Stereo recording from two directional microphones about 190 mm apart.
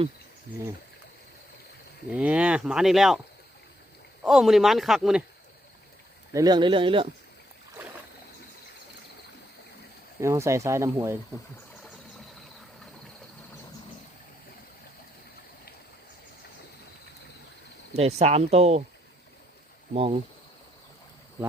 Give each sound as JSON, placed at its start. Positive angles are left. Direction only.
{"t": 2.0, "sound": "speech", "side_deg": -5}
{"t": 4.2, "sound": "speech", "side_deg": 0}
{"t": 6.3, "sound": "speech", "side_deg": -20}
{"t": 10.2, "sound": "speech", "side_deg": -15}
{"t": 17.9, "sound": "speech", "side_deg": -35}
{"t": 19.9, "sound": "speech", "side_deg": -30}